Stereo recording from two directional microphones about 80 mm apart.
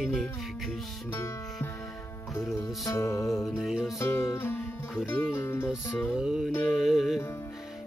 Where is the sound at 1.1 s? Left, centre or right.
Left.